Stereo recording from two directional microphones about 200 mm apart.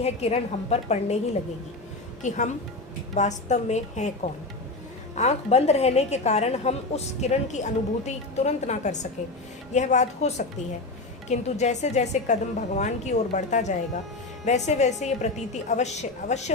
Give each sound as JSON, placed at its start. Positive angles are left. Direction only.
{"t": 0.0, "sound": "a woman's voice", "side_deg": 30}
{"t": 2.2, "sound": "a woman's voice", "side_deg": 40}